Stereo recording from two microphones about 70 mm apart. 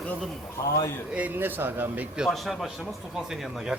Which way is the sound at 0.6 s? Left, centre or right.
Left.